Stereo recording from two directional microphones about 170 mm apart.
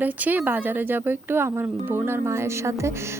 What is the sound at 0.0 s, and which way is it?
Speech, 10° right (ahead or behind).